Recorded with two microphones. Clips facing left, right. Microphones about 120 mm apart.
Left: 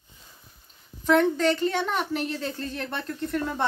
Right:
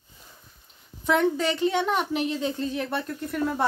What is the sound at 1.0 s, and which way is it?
A woman's voice, 10° right (ahead or behind).